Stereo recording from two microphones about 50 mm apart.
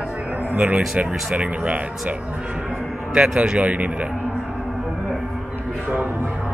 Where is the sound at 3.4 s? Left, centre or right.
Right.